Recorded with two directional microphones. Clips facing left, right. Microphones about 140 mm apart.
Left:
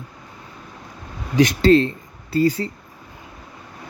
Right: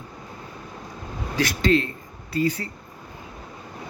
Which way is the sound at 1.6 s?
35° left (ahead or behind).